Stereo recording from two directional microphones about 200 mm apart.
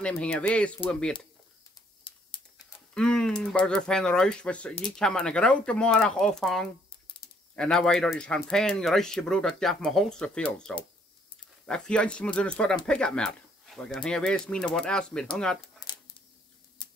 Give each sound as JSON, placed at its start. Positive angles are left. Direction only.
{"t": 0.0, "sound": "speech", "side_deg": 5}
{"t": 2.9, "sound": "speech", "side_deg": 5}
{"t": 15.8, "sound": "a sound", "side_deg": 15}